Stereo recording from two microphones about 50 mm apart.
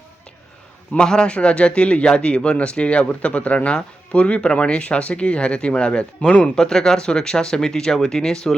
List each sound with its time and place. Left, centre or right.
0.9 s speech: centre